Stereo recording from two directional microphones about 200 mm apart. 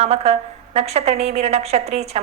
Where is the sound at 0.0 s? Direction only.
30° right (ahead or behind).